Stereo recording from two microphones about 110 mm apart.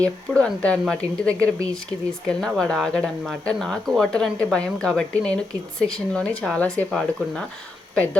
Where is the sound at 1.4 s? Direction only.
30° right (ahead or behind).